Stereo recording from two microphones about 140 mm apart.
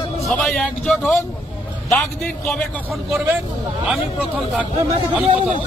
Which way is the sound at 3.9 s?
Centre (ahead or behind).